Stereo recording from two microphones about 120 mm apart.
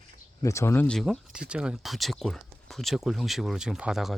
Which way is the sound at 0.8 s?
5° left (ahead or behind).